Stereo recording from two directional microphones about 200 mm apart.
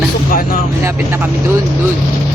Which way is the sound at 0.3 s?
45° left (ahead or behind).